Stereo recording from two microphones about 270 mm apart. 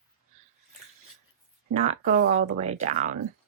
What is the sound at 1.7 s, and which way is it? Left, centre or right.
Speech, right.